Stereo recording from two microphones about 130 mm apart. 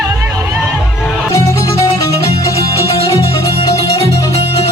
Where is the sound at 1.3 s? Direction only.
25° left (ahead or behind).